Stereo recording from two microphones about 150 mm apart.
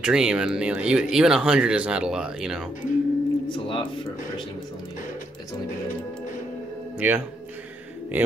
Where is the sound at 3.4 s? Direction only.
35° left (ahead or behind).